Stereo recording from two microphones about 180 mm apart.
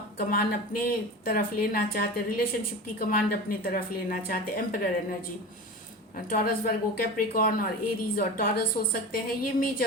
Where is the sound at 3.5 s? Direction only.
50° left (ahead or behind).